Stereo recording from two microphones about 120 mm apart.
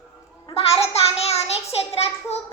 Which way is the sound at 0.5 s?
55° left (ahead or behind).